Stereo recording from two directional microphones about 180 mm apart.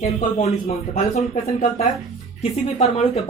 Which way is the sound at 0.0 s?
45° left (ahead or behind).